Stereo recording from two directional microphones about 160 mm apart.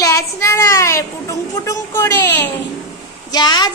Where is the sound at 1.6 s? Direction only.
20° left (ahead or behind).